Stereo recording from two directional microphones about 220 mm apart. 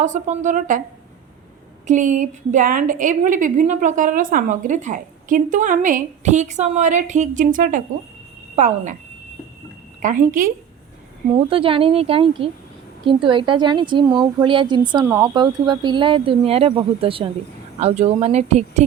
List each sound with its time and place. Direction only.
0.0 s a woman's voice: 35° right (ahead or behind)
1.9 s a woman's voice: 35° right (ahead or behind)
10.0 s a woman's voice: 35° right (ahead or behind)
11.3 s speech: 25° right (ahead or behind)
15.0 s speech: 10° right (ahead or behind); by 18.8 s 30° right (ahead or behind)